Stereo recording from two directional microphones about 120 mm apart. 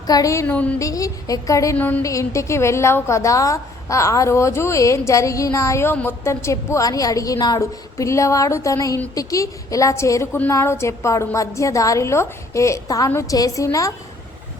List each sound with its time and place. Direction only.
0.1 s a woman's voice: 30° left (ahead or behind)
0.4 s speech: 10° left (ahead or behind)
0.8 s a woman's voice: 25° left (ahead or behind)
1.7 s speech: 15° left (ahead or behind)
2.0 s a woman's voice: 25° left (ahead or behind)